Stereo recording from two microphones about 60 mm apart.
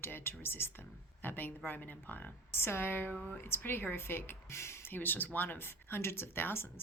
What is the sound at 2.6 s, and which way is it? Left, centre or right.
Speech, left.